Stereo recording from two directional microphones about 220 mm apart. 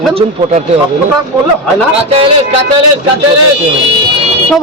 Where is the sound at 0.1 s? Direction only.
25° right (ahead or behind).